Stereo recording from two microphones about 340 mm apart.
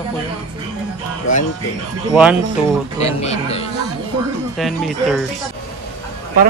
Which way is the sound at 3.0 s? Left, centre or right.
Centre.